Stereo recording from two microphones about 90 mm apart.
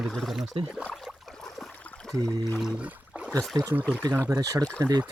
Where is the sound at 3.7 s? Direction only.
15° right (ahead or behind).